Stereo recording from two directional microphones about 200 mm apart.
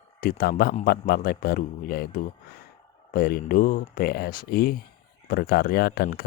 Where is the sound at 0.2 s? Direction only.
45° left (ahead or behind).